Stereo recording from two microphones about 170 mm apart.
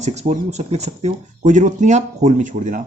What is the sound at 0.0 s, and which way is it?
Speech, 40° right (ahead or behind).